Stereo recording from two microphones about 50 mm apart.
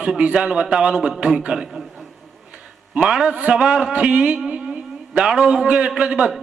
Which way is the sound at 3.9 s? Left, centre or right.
Right.